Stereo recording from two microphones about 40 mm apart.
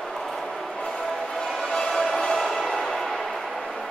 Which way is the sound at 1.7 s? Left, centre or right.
Centre.